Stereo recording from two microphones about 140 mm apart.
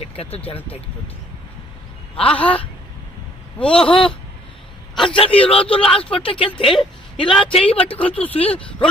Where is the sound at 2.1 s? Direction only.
40° left (ahead or behind).